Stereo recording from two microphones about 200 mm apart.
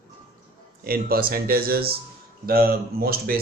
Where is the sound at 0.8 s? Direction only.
50° right (ahead or behind).